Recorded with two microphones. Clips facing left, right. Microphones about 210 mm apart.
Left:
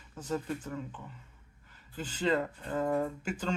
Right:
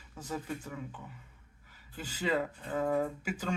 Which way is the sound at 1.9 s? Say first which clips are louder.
Left 2 dB; 10° right (ahead or behind).